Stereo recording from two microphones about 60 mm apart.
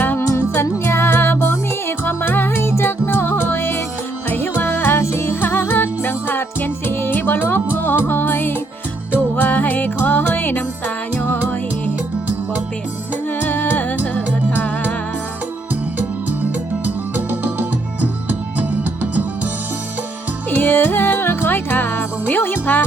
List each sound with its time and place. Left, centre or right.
0.2 s music: left
13.5 s music: left
16.8 s music: right
20.5 s music: left